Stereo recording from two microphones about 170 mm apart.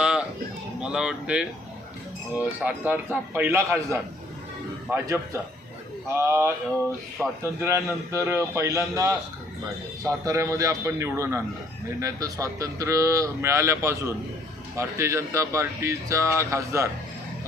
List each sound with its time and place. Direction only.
0.0 s a sound: 5° right (ahead or behind)
0.8 s speech: 5° right (ahead or behind)
4.9 s speech: 15° right (ahead or behind)